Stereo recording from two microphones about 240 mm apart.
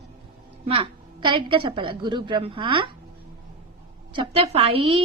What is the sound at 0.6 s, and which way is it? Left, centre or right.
Speech, right.